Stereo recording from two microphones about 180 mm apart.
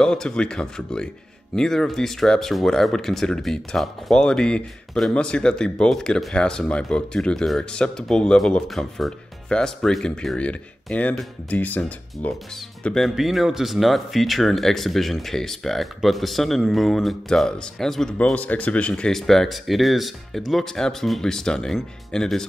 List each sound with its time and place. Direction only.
0.0 s speech: 5° left (ahead or behind)